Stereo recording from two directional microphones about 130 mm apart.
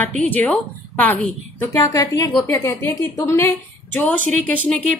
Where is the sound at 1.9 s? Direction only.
25° left (ahead or behind).